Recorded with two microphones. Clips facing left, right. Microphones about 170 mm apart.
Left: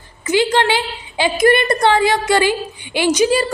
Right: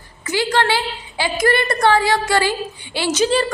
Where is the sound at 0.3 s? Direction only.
20° left (ahead or behind).